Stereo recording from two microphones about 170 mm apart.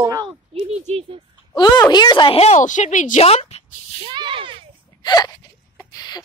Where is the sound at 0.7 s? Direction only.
40° right (ahead or behind).